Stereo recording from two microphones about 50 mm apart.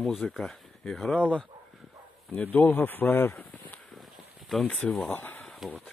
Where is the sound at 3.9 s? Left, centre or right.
Centre.